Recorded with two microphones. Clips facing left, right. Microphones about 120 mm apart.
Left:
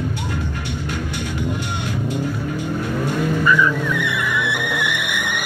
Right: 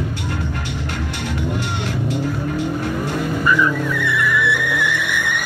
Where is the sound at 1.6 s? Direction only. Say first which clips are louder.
Right 1 dB; 85° right.